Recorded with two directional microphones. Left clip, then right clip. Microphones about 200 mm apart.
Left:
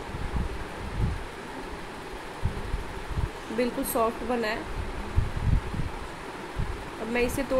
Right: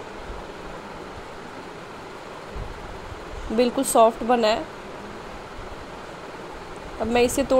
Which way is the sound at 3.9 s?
40° right (ahead or behind).